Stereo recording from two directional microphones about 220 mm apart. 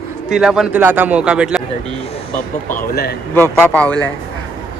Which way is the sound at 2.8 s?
45° left (ahead or behind).